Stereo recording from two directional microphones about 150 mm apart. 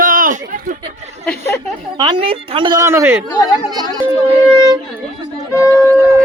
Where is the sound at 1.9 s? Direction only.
30° right (ahead or behind).